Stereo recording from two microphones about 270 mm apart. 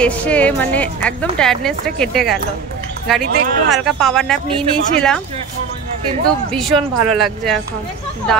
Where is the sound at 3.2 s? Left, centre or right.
Right.